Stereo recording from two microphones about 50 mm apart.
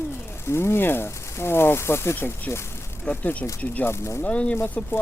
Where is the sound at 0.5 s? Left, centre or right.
Left.